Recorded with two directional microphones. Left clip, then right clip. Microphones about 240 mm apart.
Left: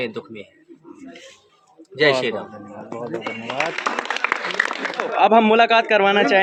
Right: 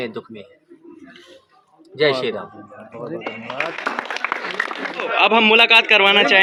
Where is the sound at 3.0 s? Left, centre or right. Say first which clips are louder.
Even; left.